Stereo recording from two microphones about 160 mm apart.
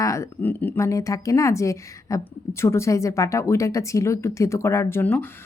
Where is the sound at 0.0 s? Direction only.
20° left (ahead or behind).